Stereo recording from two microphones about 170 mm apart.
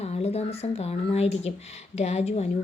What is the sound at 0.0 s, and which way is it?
Speech, 40° left (ahead or behind).